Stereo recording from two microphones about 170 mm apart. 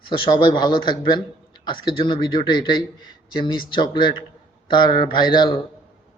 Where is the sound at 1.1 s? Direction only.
25° left (ahead or behind).